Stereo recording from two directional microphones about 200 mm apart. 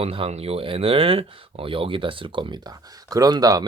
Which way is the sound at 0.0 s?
30° right (ahead or behind).